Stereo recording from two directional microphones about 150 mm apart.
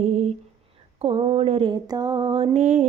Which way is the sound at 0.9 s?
35° right (ahead or behind).